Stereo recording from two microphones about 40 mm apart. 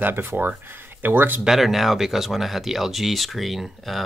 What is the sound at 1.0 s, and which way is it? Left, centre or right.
Speech, right.